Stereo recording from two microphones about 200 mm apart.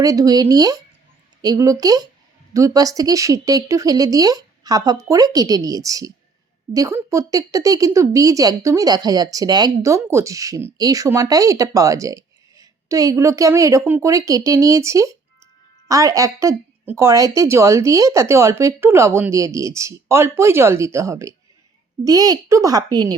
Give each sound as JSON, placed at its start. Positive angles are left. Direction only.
{"t": 0.0, "sound": "a woman's voice", "side_deg": -20}